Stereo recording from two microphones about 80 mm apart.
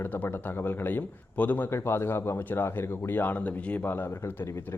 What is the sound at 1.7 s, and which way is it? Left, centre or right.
A man's voice, left.